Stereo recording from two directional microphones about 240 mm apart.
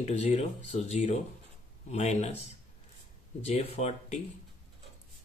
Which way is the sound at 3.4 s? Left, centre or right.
Left.